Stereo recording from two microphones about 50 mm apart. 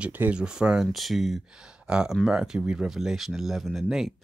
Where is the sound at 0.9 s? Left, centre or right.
Centre.